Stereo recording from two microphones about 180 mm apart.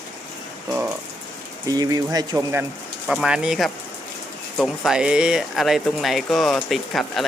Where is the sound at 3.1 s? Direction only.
5° right (ahead or behind).